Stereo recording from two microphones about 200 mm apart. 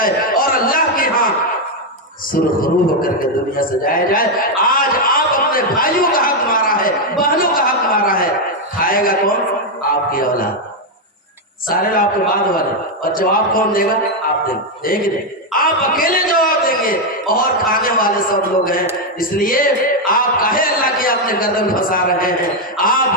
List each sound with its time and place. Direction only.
0.0 s a sound: 45° left (ahead or behind)
2.3 s a man's voice: 45° left (ahead or behind)
11.7 s a man's voice: 45° left (ahead or behind)